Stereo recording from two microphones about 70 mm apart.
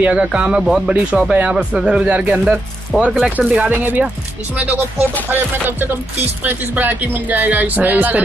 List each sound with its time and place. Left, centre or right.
0.0 s speech: centre
2.9 s speech: centre
3.3 s speech: centre